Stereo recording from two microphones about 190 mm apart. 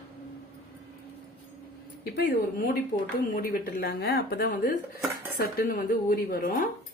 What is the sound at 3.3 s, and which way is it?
A woman's voice, 55° left (ahead or behind).